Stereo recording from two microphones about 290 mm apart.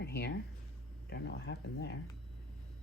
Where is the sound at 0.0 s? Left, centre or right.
Left.